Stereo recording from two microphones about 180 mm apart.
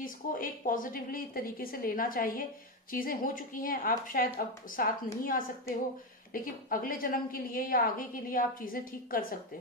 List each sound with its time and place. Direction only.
0.0 s a woman's voice: 50° left (ahead or behind)